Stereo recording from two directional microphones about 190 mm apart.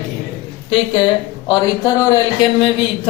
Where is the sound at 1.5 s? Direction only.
20° left (ahead or behind).